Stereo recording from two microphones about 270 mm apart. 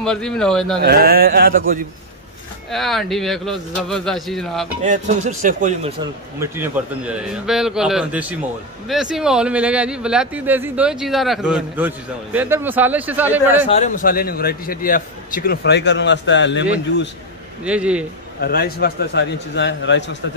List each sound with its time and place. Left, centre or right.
0.0 s speech: centre
0.8 s speech: right
2.7 s speech: centre
4.8 s speech: right
6.4 s speech: centre
13.7 s a man's voice: left
17.6 s speech: centre
18.4 s a man's voice: left